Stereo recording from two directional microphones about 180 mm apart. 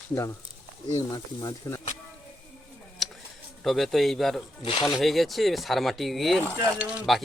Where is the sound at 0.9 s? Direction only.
20° left (ahead or behind).